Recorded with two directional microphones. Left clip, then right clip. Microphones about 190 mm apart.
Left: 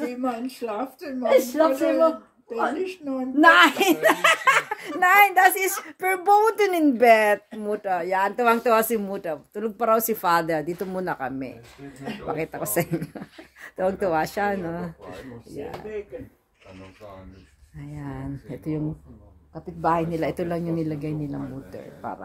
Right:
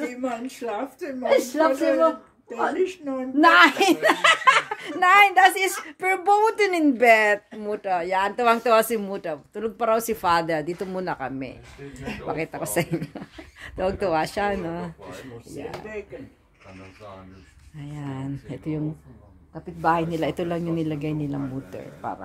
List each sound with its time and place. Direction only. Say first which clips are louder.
0.0 s speech: left 1 dB; centre (ahead or behind)
1.2 s speech: left 1 dB; 20° right (ahead or behind)
2.8 s a woman's voice: right 3 dB; centre (ahead or behind)
3.3 s a woman's voice: even; 25° right (ahead or behind)
17.7 s speech: right 1 dB; 20° right (ahead or behind)